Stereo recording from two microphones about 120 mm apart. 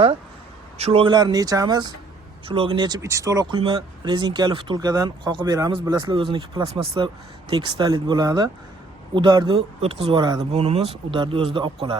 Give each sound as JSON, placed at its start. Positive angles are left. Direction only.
{"t": 0.8, "sound": "a man's voice", "side_deg": -60}
{"t": 1.0, "sound": "speech", "side_deg": -35}
{"t": 2.5, "sound": "speech", "side_deg": -45}
{"t": 3.5, "sound": "speech", "side_deg": -40}
{"t": 6.1, "sound": "speech", "side_deg": -45}
{"t": 9.6, "sound": "speech", "side_deg": -55}
{"t": 10.2, "sound": "speech", "side_deg": -35}
{"t": 10.5, "sound": "speech", "side_deg": -55}